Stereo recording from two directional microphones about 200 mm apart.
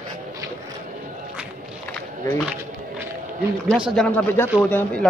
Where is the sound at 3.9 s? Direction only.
5° left (ahead or behind).